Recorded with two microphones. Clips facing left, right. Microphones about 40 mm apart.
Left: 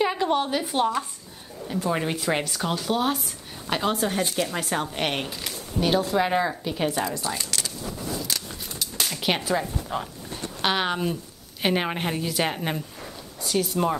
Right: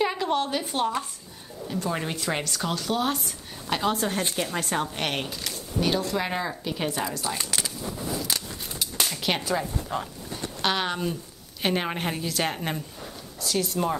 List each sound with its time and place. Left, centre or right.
0.0 s a woman's voice: centre
4.2 s speech: centre
7.3 s a sound: centre
9.1 s speech: centre